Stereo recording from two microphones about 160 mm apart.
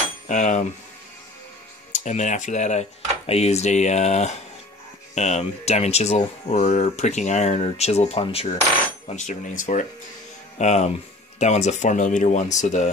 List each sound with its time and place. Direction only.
0.3 s speech: 50° left (ahead or behind)
1.9 s speech: 50° left (ahead or behind)
9.0 s speech: 50° left (ahead or behind)